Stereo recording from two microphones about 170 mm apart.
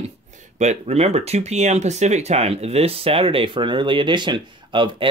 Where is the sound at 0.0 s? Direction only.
45° right (ahead or behind).